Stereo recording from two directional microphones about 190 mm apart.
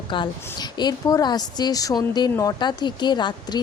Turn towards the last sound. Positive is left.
turn(degrees=25)  # may be behind; listen again after turning